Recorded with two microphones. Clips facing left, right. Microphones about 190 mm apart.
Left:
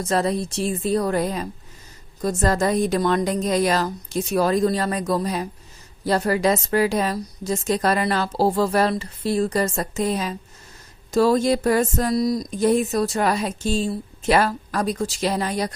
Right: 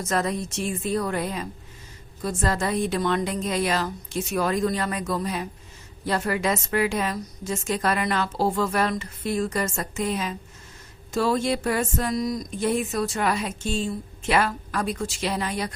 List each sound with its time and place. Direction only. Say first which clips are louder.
0.0 s speech: left 4 dB; 30° left (ahead or behind)